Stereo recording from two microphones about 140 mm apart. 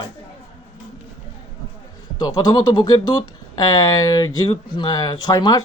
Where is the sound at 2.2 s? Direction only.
30° left (ahead or behind).